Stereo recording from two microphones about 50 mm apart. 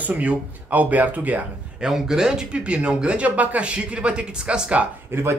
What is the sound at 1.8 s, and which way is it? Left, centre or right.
Speech, centre.